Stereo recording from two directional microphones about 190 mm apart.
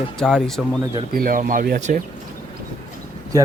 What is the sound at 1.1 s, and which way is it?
Speech, 50° right (ahead or behind).